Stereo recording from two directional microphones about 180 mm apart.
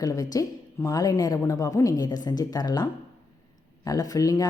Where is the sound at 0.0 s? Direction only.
20° left (ahead or behind).